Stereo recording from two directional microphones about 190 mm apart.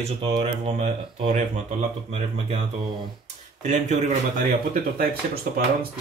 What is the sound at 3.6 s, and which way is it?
Speech, 40° right (ahead or behind).